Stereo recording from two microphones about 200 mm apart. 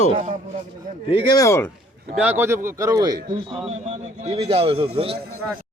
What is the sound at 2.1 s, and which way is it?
A man's voice, 5° right (ahead or behind).